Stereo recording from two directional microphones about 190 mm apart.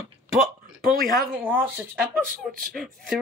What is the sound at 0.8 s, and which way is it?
Speech, 50° right (ahead or behind).